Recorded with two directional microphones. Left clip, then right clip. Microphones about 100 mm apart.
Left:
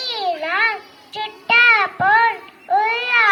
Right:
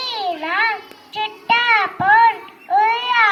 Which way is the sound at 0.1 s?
10° left (ahead or behind).